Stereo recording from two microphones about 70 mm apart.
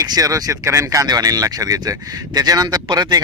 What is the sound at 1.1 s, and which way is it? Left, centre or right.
Speech, right.